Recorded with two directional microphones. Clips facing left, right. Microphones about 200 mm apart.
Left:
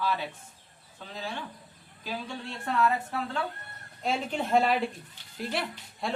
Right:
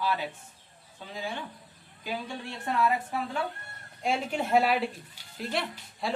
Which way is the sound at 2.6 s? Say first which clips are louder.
Even; 15° right (ahead or behind).